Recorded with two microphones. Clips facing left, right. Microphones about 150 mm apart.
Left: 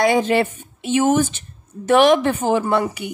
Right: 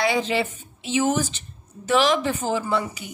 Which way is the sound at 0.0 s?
50° left (ahead or behind).